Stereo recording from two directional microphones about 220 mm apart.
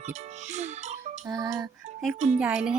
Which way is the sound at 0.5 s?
30° right (ahead or behind).